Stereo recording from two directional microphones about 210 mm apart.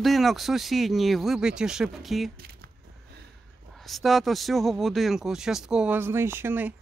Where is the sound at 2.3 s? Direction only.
45° right (ahead or behind).